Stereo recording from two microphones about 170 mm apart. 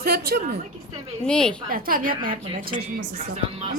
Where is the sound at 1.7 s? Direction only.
55° right (ahead or behind).